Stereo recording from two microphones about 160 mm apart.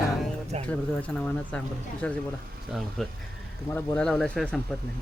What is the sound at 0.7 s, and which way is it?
Speech, 10° left (ahead or behind).